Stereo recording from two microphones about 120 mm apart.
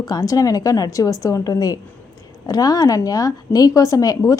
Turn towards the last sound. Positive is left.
turn(degrees=30)  # may be behind; listen again after turning